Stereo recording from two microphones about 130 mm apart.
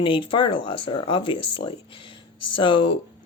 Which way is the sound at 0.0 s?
40° left (ahead or behind).